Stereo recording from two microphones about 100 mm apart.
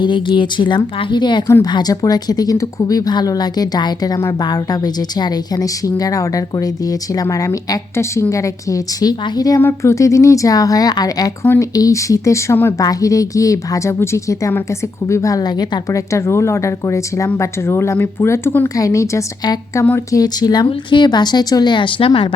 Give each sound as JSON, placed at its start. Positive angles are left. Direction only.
{"t": 0.0, "sound": "a woman's voice", "side_deg": 50}
{"t": 9.6, "sound": "a woman's voice", "side_deg": 25}
{"t": 18.8, "sound": "a woman's voice", "side_deg": 30}